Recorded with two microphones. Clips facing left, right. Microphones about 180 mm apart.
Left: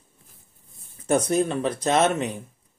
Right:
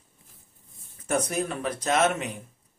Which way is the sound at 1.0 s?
30° left (ahead or behind).